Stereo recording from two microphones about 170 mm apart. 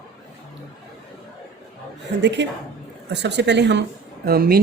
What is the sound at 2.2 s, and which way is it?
A woman's voice, 90° right.